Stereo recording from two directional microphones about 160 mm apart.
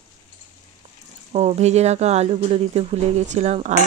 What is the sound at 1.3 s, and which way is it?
Speech, 40° right (ahead or behind).